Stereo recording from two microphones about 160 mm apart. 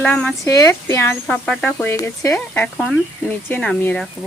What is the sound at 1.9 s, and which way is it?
Speech, 20° left (ahead or behind).